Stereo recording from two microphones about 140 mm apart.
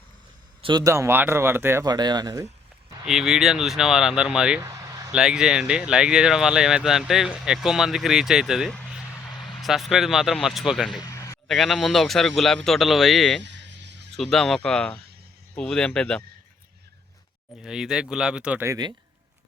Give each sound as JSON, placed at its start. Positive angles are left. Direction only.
{"t": 0.6, "sound": "speech", "side_deg": -30}
{"t": 1.8, "sound": "speech", "side_deg": -30}
{"t": 3.1, "sound": "speech", "side_deg": -5}
{"t": 4.6, "sound": "a sound", "side_deg": -25}
{"t": 5.1, "sound": "speech", "side_deg": -5}
{"t": 11.0, "sound": "a sound", "side_deg": 20}
{"t": 11.4, "sound": "speech", "side_deg": 0}
{"t": 17.6, "sound": "speech", "side_deg": -5}
{"t": 18.6, "sound": "speech", "side_deg": -25}